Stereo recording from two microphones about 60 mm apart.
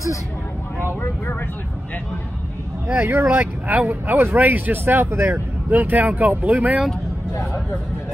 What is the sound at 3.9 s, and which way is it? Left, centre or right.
Speech, right.